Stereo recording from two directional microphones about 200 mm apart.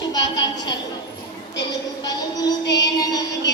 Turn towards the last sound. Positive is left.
turn(degrees=20)  # may be behind; listen again after turning